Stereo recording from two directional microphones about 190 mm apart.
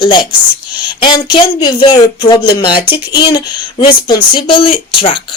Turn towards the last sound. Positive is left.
turn(degrees=30)  # may be behind; listen again after turning